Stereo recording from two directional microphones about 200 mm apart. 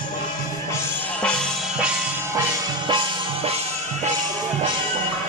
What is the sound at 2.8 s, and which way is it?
Music, 25° right (ahead or behind).